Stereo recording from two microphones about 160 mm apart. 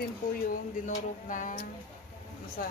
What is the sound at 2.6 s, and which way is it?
Speech, 65° left (ahead or behind).